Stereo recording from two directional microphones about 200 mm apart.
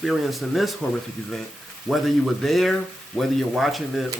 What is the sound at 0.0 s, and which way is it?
Speech, centre (ahead or behind).